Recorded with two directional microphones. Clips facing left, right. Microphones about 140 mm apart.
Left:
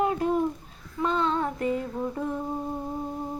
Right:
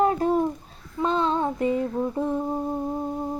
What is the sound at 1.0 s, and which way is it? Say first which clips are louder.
Female singing: right 3 dB; 30° right (ahead or behind).